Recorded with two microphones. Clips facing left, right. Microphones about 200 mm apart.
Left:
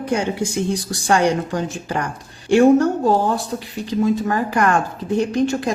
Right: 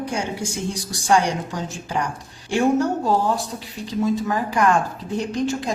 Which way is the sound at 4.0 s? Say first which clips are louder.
Left 3 dB; 60° left (ahead or behind).